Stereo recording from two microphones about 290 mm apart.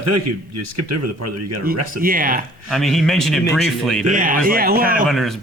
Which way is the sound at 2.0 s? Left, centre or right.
Right.